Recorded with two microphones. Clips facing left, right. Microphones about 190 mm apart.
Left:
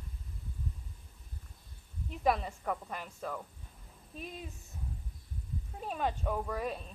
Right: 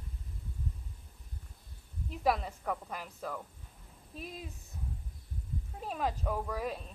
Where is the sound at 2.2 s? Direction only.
Centre (ahead or behind).